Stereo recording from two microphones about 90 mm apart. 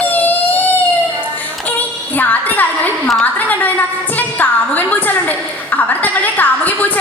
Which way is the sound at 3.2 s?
20° left (ahead or behind).